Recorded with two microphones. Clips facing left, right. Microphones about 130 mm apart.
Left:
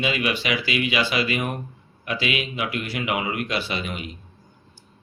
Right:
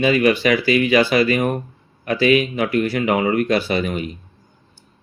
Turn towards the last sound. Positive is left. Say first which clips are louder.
# right 8 dB
turn(degrees=-40)  # may be behind; listen again after turning